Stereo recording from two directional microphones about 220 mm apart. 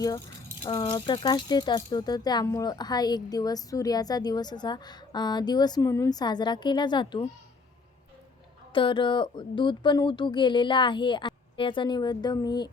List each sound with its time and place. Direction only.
0.6 s speech: 20° left (ahead or behind)
8.7 s speech: 20° left (ahead or behind)